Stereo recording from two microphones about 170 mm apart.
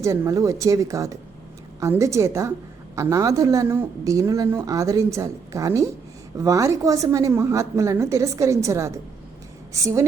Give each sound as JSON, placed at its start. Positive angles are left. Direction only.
{"t": 0.0, "sound": "a woman's voice", "side_deg": -20}